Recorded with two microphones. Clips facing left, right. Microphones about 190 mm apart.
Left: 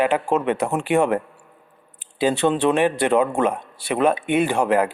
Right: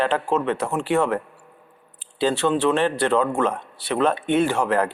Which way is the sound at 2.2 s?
15° left (ahead or behind).